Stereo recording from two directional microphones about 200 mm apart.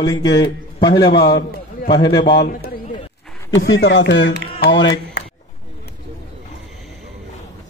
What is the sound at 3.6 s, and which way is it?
Speech, 70° left (ahead or behind).